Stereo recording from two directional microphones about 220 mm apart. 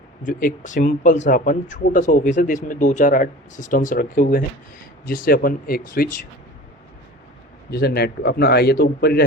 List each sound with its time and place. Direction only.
0.3 s speech: 35° left (ahead or behind)
7.7 s speech: 45° left (ahead or behind)